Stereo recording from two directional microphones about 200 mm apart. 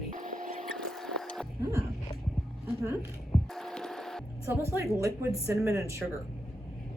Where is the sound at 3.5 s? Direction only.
5° left (ahead or behind).